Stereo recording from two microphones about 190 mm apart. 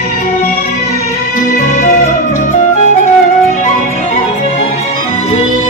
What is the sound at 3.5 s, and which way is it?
Music, 40° left (ahead or behind).